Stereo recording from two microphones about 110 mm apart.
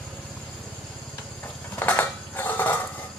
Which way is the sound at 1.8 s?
15° left (ahead or behind).